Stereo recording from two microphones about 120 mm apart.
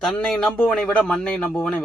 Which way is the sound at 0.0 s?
10° left (ahead or behind).